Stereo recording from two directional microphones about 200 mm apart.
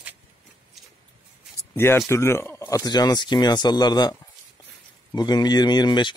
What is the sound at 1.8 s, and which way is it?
Speech, 15° left (ahead or behind).